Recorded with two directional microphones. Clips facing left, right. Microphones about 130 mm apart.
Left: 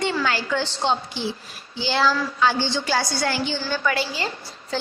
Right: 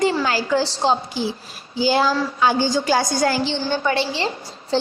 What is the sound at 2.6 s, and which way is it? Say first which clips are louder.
Speech: right 5 dB; 40° right (ahead or behind).